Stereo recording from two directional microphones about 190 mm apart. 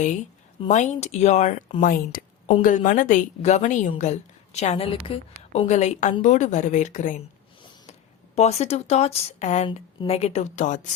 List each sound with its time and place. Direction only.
0.0 s a woman's voice: 40° left (ahead or behind)
8.4 s a woman's voice: 35° left (ahead or behind)